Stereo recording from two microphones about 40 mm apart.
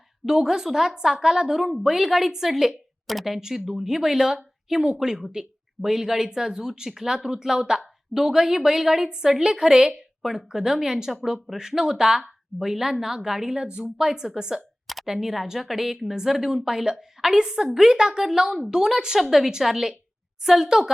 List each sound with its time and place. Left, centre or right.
0.3 s a woman's voice: centre
13.7 s speech: right
14.0 s a woman's voice: centre